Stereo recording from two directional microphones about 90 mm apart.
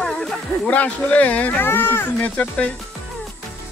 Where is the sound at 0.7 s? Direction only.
15° left (ahead or behind).